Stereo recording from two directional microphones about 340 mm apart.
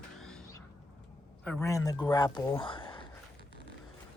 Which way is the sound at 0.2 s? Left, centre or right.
Centre.